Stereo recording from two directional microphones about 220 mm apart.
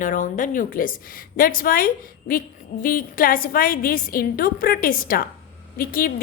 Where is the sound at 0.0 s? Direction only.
35° left (ahead or behind).